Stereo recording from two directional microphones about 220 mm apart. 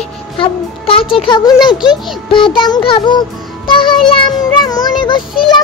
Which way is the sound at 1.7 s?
Centre (ahead or behind).